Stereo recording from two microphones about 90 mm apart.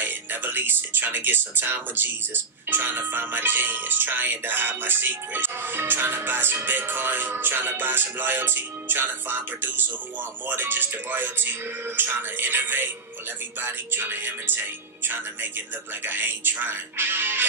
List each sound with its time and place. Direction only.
0.0 s speech: 20° right (ahead or behind)
16.1 s speech: 20° right (ahead or behind)